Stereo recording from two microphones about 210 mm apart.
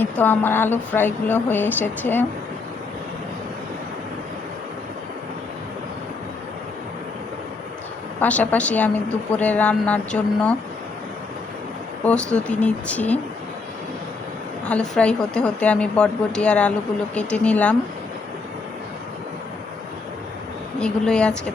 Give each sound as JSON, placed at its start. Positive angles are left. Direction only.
{"t": 0.0, "sound": "speech", "side_deg": 10}
{"t": 8.2, "sound": "speech", "side_deg": 5}
{"t": 12.0, "sound": "speech", "side_deg": 5}
{"t": 14.6, "sound": "a woman's voice", "side_deg": 5}
{"t": 20.7, "sound": "a woman's voice", "side_deg": 5}